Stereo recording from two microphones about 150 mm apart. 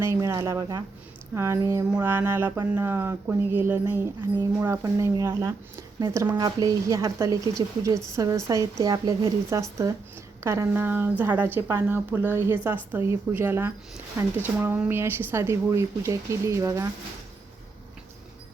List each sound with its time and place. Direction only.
0.0 s speech: 20° right (ahead or behind)